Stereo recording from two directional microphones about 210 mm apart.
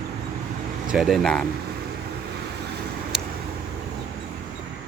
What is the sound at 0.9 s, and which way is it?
Speech, centre (ahead or behind).